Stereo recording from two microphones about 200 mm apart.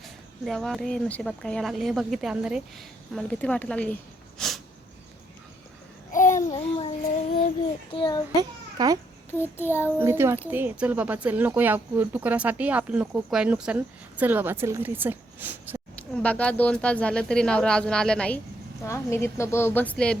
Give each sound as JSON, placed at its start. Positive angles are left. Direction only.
{"t": 0.4, "sound": "a woman's voice", "side_deg": 0}
{"t": 4.4, "sound": "a sound", "side_deg": 0}
{"t": 6.1, "sound": "babbling", "side_deg": 40}
{"t": 6.5, "sound": "child singing", "side_deg": 25}
{"t": 7.9, "sound": "a child's voice", "side_deg": 20}
{"t": 8.4, "sound": "a child's voice", "side_deg": -20}
{"t": 9.3, "sound": "a woman's voice", "side_deg": 10}
{"t": 10.0, "sound": "speech", "side_deg": -10}
{"t": 16.0, "sound": "a woman's voice", "side_deg": 5}